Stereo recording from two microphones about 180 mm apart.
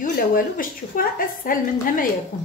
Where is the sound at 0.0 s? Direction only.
50° left (ahead or behind).